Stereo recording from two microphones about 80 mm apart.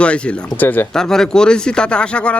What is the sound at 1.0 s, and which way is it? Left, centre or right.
Speech, centre.